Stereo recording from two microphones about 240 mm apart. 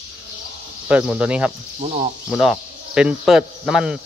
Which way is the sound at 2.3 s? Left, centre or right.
Centre.